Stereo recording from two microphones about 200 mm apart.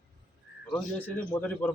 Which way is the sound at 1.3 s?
5° left (ahead or behind).